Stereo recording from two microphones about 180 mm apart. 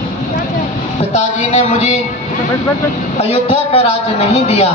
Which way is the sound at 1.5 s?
40° left (ahead or behind).